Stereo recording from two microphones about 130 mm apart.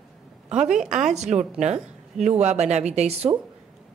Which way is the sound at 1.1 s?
60° right (ahead or behind).